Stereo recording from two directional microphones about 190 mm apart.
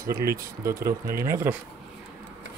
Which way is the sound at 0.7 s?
15° right (ahead or behind).